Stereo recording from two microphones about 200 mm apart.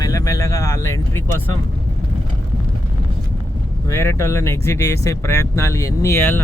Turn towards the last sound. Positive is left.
turn(degrees=10)  # may be behind; listen again after turning